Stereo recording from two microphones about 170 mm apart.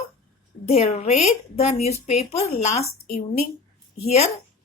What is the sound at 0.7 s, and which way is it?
Speech, 40° left (ahead or behind).